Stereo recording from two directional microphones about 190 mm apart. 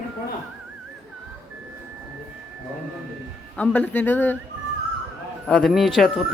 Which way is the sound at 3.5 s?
10° left (ahead or behind).